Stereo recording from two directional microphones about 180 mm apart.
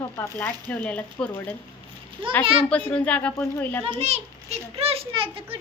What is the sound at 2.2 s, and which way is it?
Speech, 30° right (ahead or behind).